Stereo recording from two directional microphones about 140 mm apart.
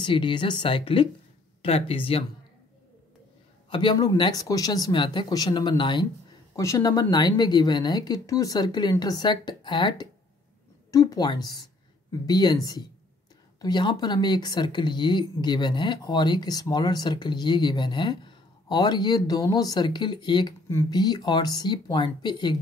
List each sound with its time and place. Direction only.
0.0 s speech: 35° left (ahead or behind)
3.7 s speech: 30° left (ahead or behind)
6.5 s speech: 20° left (ahead or behind)
13.6 s speech: 30° left (ahead or behind)